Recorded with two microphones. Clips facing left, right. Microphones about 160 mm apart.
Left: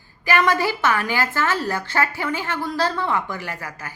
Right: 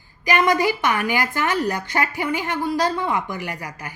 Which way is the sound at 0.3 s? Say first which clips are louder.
Right 1 dB; 15° right (ahead or behind).